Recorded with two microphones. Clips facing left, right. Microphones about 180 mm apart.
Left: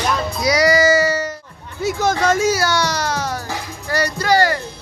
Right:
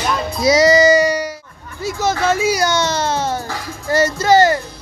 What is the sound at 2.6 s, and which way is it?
Speech, 20° right (ahead or behind).